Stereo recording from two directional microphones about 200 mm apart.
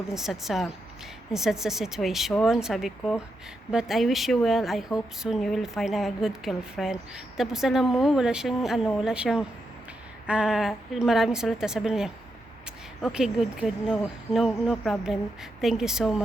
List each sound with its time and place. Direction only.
0.1 s a woman's voice: centre (ahead or behind)